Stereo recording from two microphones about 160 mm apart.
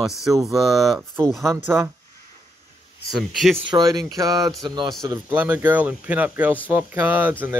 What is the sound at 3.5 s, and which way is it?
Speech, 30° right (ahead or behind).